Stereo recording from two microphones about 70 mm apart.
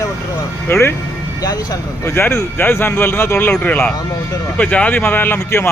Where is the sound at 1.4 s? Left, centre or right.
Left.